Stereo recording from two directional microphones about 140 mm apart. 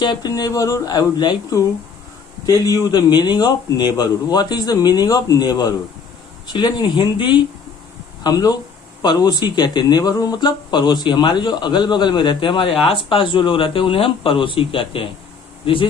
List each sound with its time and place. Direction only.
0.0 s speech: 30° left (ahead or behind)